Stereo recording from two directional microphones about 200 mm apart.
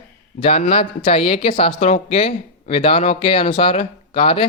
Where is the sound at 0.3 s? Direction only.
30° left (ahead or behind).